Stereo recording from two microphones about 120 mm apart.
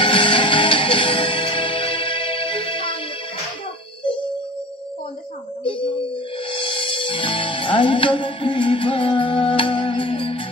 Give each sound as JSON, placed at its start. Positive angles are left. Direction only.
{"t": 0.0, "sound": "music", "side_deg": 45}
{"t": 5.6, "sound": "a sound", "side_deg": 45}
{"t": 6.5, "sound": "music", "side_deg": 45}